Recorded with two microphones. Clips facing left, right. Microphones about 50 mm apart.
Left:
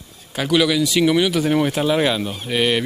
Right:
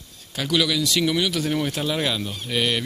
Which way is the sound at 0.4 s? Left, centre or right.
Centre.